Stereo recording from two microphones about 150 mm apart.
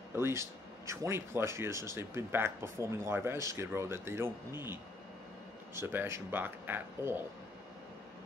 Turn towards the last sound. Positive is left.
turn(degrees=-15)  # may be behind; listen again after turning